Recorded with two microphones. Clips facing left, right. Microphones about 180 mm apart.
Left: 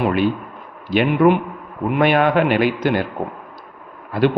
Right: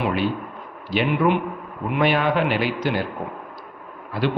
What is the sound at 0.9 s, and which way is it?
A man's voice, 55° left (ahead or behind).